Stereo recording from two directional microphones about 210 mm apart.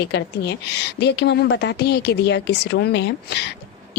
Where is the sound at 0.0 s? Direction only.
55° left (ahead or behind).